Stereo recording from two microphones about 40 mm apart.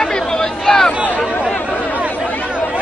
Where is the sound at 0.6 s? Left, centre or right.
Centre.